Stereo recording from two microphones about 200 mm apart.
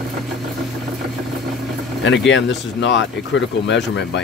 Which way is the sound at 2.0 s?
65° left (ahead or behind).